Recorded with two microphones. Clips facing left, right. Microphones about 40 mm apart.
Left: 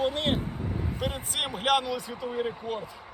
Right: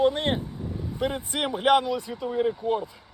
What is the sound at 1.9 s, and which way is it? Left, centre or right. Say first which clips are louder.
Speech: right 4 dB; centre.